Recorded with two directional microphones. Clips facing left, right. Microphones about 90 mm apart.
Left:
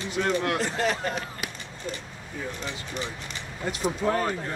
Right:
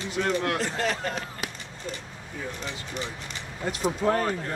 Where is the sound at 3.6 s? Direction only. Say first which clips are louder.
Right 1 dB; 40° right (ahead or behind).